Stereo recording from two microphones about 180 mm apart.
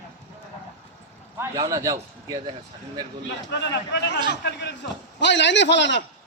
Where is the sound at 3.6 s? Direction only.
75° left (ahead or behind).